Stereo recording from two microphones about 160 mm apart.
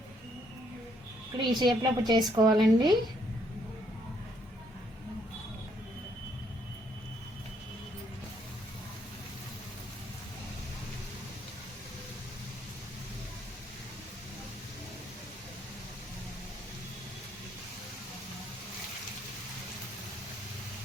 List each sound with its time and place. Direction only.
1.4 s a woman's voice: 30° right (ahead or behind)
2.5 s speech: centre (ahead or behind)